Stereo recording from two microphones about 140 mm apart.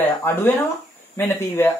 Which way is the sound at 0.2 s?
15° left (ahead or behind).